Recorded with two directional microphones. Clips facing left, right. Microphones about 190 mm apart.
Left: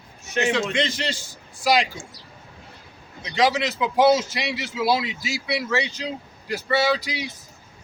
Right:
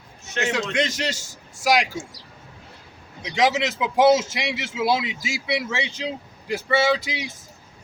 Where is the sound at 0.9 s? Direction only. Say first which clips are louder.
Right 1 dB; 45° right (ahead or behind).